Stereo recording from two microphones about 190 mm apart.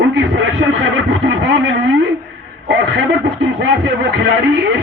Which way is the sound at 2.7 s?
65° right (ahead or behind).